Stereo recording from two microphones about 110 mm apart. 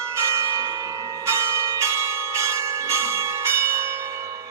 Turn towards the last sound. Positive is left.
turn(degrees=-25)  # may be behind; listen again after turning